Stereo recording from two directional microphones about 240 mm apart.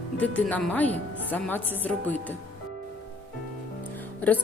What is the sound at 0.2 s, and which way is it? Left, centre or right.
Speech, centre.